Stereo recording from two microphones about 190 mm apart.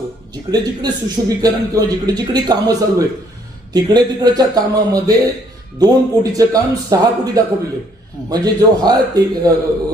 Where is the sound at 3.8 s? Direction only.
20° right (ahead or behind).